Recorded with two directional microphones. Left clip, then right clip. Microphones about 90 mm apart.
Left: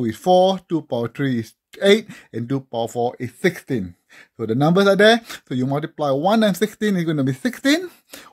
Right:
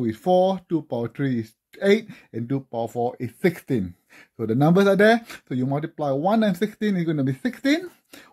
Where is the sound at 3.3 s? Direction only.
15° left (ahead or behind).